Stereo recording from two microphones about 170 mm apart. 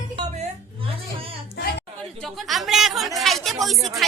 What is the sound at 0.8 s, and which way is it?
Speech, 35° right (ahead or behind).